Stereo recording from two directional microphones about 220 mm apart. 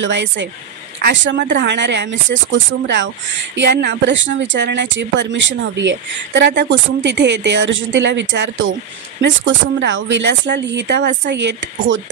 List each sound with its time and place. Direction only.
0.0 s speech: 55° right (ahead or behind)